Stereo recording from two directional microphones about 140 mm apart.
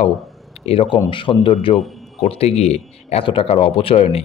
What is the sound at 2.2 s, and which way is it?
Speech, 45° left (ahead or behind).